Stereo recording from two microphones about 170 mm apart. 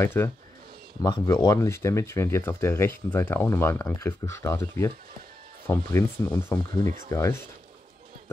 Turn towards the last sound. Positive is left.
turn(degrees=15)  # may be behind; listen again after turning